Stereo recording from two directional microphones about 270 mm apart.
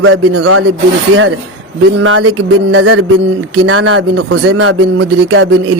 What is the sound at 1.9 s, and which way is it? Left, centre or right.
Speech, right.